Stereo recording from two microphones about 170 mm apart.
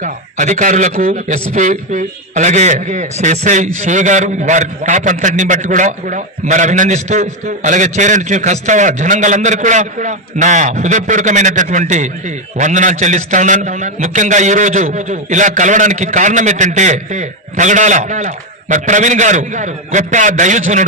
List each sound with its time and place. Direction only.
0.0 s a man's voice: 45° right (ahead or behind)